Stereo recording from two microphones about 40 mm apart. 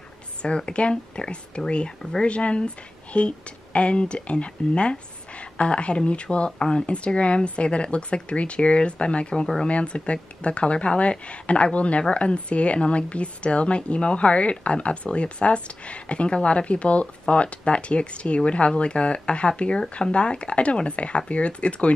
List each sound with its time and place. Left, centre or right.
0.4 s a woman's voice: left